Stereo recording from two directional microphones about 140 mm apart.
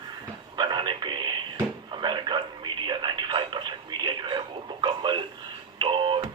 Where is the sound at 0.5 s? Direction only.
30° right (ahead or behind).